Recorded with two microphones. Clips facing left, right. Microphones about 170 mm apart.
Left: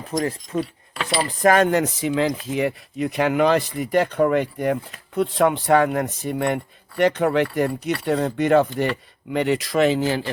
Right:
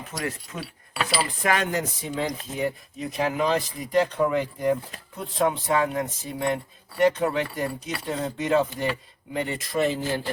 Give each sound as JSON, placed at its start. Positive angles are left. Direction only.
{"t": 0.6, "sound": "keys jangling", "side_deg": -5}
{"t": 1.3, "sound": "a sound", "side_deg": 40}
{"t": 1.7, "sound": "speech", "side_deg": 90}
{"t": 2.5, "sound": "speech", "side_deg": 75}
{"t": 9.3, "sound": "speech", "side_deg": 80}